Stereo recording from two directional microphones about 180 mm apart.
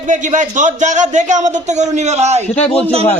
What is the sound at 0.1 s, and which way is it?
Speech, 45° right (ahead or behind).